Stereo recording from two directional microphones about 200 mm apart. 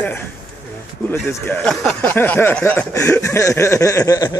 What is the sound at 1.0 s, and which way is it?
Speech, 10° left (ahead or behind).